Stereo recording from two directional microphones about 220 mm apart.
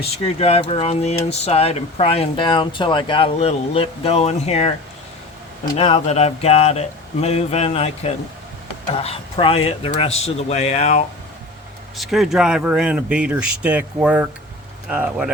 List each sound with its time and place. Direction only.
0.0 s speech: 25° left (ahead or behind)
5.7 s speech: 30° left (ahead or behind)
11.9 s speech: centre (ahead or behind)